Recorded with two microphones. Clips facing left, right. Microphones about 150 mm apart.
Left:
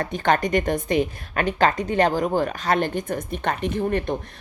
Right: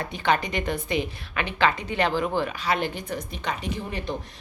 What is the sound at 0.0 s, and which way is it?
A woman's voice, 45° left (ahead or behind).